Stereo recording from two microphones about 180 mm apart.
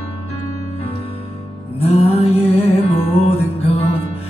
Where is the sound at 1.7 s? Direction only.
35° left (ahead or behind).